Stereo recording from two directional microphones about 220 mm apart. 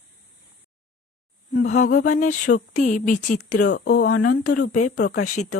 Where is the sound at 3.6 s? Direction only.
45° left (ahead or behind).